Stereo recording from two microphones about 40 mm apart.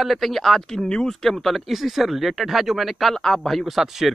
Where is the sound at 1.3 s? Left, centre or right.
Centre.